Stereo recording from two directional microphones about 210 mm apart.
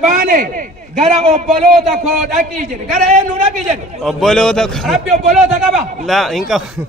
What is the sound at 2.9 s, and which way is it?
Speech, 35° right (ahead or behind).